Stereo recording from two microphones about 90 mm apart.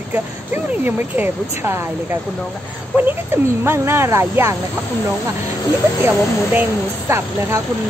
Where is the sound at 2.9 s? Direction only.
25° right (ahead or behind).